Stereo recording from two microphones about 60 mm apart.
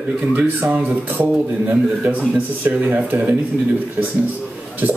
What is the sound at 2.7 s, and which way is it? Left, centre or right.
Speech, right.